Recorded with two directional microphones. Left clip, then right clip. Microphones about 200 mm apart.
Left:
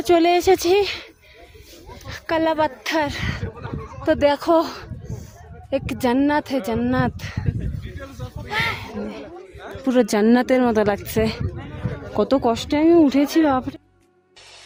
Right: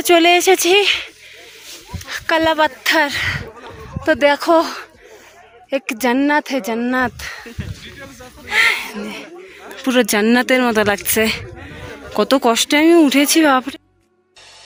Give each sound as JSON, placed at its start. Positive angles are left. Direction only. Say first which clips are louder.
{"t": 0.0, "sound": "speech", "louder": "right 5 dB", "side_deg": -5}
{"t": 7.2, "sound": "speech", "louder": "right 6 dB", "side_deg": 0}
{"t": 8.4, "sound": "a sound", "louder": "right 9 dB", "side_deg": 10}
{"t": 9.8, "sound": "speech", "louder": "right 3 dB", "side_deg": 5}